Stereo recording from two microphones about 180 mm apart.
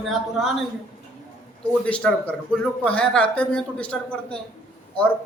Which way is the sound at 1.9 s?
5° left (ahead or behind).